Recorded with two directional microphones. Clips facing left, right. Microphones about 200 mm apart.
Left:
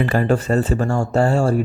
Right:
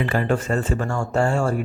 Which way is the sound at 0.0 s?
40° left (ahead or behind).